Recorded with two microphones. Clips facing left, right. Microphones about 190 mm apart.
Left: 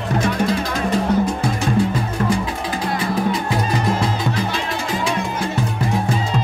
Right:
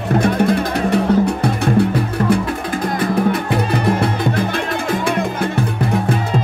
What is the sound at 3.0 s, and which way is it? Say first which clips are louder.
Music: right 5 dB; 60° right (ahead or behind).